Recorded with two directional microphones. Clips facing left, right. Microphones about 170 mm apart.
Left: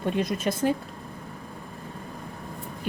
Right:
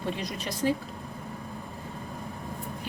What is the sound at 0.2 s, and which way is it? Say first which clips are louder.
Speech: left 6 dB; 50° left (ahead or behind).